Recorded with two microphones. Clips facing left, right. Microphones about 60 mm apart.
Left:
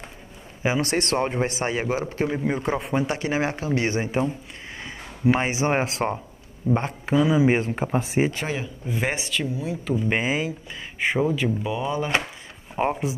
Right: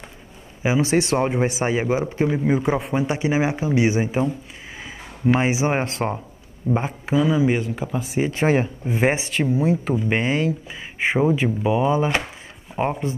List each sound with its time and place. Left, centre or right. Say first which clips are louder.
0.6 s speech: right 4 dB; centre
2.2 s speech: right 5 dB; centre
7.6 s speech: left 1 dB; left
8.5 s speech: right 9 dB; right
9.9 s speech: right 2 dB; centre
10.7 s speech: right 3 dB; centre
12.7 s speech: right 1 dB; centre